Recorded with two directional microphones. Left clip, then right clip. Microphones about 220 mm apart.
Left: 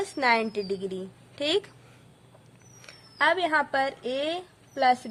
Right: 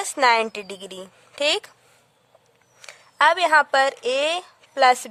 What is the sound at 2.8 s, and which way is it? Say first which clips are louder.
A woman's voice: right 7 dB; 45° right (ahead or behind).